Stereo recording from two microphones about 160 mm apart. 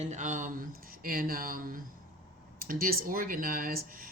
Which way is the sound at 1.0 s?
65° right (ahead or behind).